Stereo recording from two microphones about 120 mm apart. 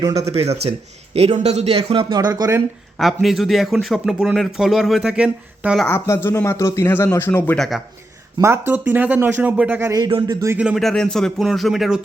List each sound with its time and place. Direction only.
0.0 s speech: 30° right (ahead or behind)
0.3 s speech: 60° right (ahead or behind); by 2.6 s 30° right (ahead or behind)
3.0 s speech: centre (ahead or behind)
5.9 s speech: 20° left (ahead or behind)
7.5 s speech: 5° left (ahead or behind)
8.4 s speech: 20° right (ahead or behind)
10.1 s speech: 40° right (ahead or behind)
10.8 s speech: 5° left (ahead or behind)